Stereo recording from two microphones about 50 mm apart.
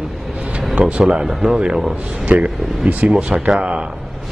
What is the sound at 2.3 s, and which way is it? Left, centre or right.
Speech, right.